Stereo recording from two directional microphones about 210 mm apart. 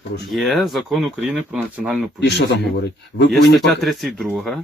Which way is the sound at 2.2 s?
55° left (ahead or behind).